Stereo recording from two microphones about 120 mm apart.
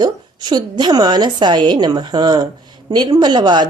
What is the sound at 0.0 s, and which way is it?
A woman's voice, 35° right (ahead or behind).